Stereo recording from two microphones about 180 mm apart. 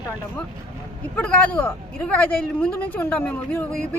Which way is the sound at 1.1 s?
5° left (ahead or behind).